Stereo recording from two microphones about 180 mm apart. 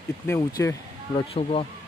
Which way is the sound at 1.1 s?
30° left (ahead or behind).